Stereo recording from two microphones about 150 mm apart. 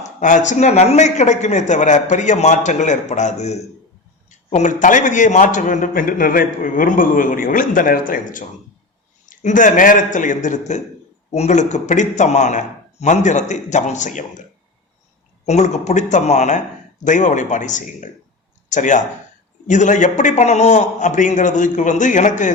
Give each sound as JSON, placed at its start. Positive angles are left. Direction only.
{"t": 0.0, "sound": "a man's voice", "side_deg": 55}
{"t": 15.4, "sound": "a man's voice", "side_deg": 50}